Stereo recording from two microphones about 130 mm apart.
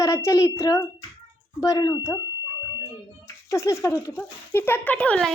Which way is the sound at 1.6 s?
30° left (ahead or behind).